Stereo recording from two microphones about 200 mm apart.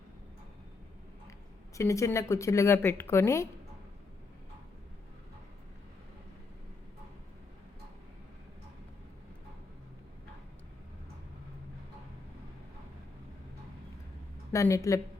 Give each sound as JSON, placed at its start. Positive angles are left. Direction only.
{"t": 1.7, "sound": "a woman's voice", "side_deg": 15}
{"t": 14.5, "sound": "a woman's voice", "side_deg": 15}